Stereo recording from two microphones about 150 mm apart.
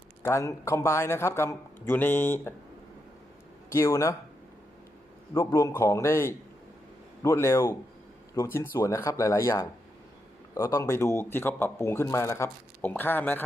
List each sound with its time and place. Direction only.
0.2 s speech: 20° left (ahead or behind)
3.7 s a man's voice: 20° left (ahead or behind)
5.3 s a man's voice: 20° left (ahead or behind)